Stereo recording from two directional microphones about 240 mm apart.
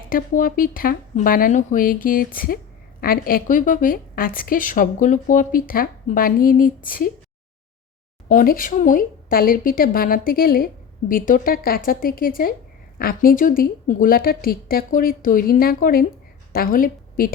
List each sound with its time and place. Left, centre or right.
0.1 s a woman's voice: left
8.3 s a woman's voice: left